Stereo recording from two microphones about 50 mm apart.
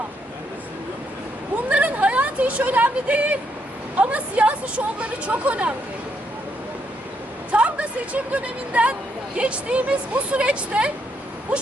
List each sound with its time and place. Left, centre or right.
1.7 s a sound: right
3.9 s a woman's voice: right
7.5 s a woman's voice: right